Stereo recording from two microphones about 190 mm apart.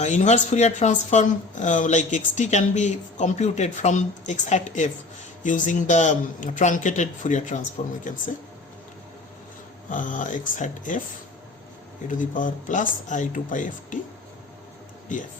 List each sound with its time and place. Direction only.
0.0 s speech: 40° left (ahead or behind)
9.9 s speech: 45° left (ahead or behind)
12.2 s speech: 45° left (ahead or behind)